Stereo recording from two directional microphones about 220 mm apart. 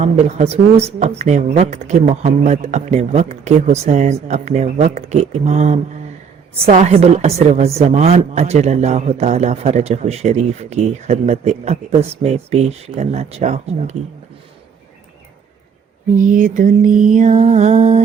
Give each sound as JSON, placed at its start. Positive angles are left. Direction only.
{"t": 0.0, "sound": "a woman's voice", "side_deg": -30}
{"t": 16.1, "sound": "speech", "side_deg": -35}